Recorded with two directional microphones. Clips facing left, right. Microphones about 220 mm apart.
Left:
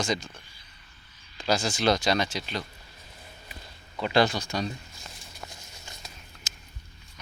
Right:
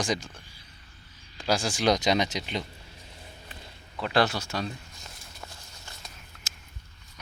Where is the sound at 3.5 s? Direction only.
Centre (ahead or behind).